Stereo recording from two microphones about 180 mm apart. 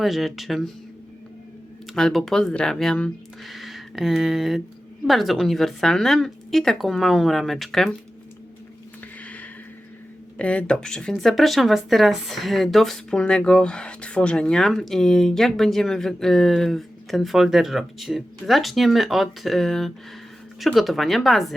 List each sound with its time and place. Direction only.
0.0 s speech: centre (ahead or behind)
1.9 s speech: centre (ahead or behind)
9.2 s a sound: 10° left (ahead or behind)
10.3 s speech: 5° left (ahead or behind)